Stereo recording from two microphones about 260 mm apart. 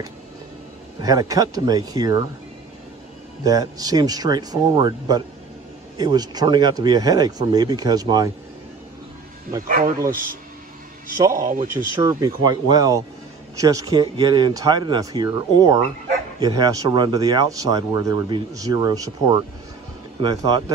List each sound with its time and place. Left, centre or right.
1.0 s speech: centre
3.4 s speech: centre
9.7 s speech: right
11.3 s speech: right
11.6 s speech: centre